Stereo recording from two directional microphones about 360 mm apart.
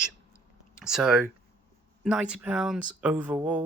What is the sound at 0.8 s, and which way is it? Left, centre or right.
Speech, centre.